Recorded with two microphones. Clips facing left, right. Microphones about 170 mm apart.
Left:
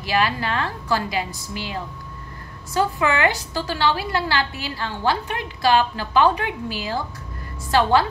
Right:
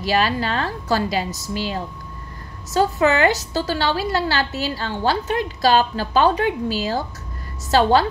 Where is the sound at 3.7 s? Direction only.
35° right (ahead or behind).